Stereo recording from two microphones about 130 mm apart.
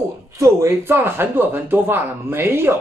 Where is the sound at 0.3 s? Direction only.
25° right (ahead or behind).